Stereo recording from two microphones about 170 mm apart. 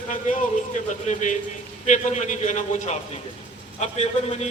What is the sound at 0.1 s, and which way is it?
A man's voice, 45° left (ahead or behind).